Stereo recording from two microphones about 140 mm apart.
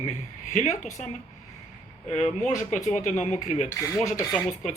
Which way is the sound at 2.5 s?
60° left (ahead or behind).